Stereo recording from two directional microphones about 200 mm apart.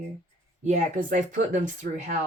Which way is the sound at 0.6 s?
40° right (ahead or behind).